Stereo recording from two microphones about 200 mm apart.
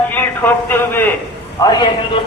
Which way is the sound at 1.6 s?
20° left (ahead or behind).